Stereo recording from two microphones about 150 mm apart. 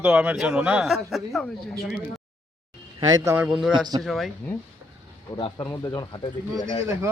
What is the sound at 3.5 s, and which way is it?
Speech, 5° right (ahead or behind).